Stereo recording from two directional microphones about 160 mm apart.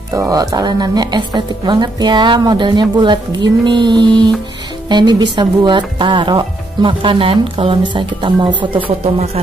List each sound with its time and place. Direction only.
0.1 s speech: 20° right (ahead or behind); by 9.4 s 35° right (ahead or behind)